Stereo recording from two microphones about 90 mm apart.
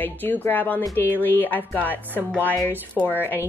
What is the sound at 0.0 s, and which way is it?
A woman's voice, 20° left (ahead or behind).